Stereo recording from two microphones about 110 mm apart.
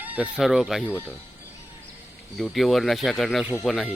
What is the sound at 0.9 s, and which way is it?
Speech, 15° right (ahead or behind).